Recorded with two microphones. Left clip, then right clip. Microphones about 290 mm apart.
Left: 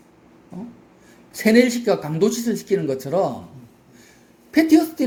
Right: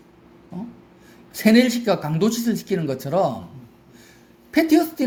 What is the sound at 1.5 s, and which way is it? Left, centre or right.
Speech, right.